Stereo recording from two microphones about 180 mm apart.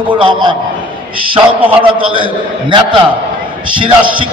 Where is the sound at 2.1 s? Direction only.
30° right (ahead or behind).